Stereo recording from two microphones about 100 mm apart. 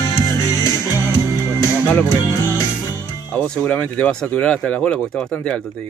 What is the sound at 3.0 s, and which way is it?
Speech, 10° left (ahead or behind).